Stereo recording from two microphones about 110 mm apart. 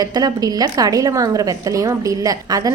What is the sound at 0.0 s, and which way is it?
A woman's voice, 40° right (ahead or behind).